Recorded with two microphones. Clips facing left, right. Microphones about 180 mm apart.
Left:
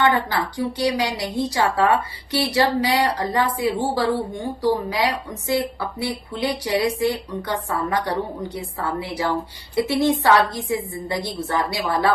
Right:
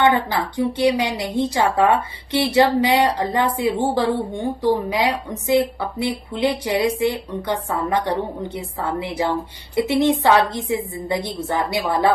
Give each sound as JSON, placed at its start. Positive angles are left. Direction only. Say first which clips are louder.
{"t": 0.0, "sound": "a woman's voice", "louder": "right 2 dB", "side_deg": -20}